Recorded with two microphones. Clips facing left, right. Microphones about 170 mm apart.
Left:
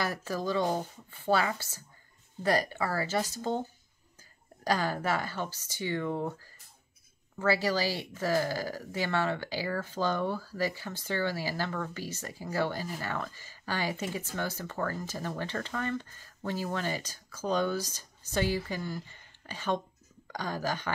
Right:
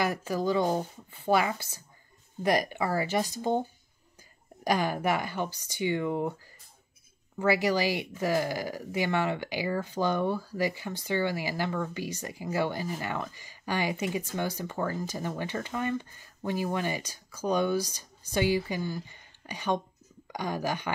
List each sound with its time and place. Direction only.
0.0 s speech: 15° right (ahead or behind)
4.6 s speech: 15° right (ahead or behind)
7.3 s speech: 15° right (ahead or behind)